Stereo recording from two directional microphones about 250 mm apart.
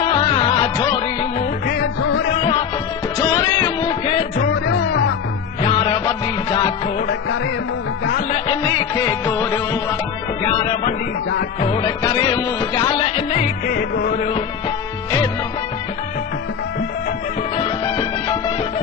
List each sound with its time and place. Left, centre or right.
0.0 s music: left
1.6 s music: left
2.3 s music: left
4.4 s music: left
5.6 s music: centre
8.3 s music: centre
11.6 s music: centre
17.6 s music: centre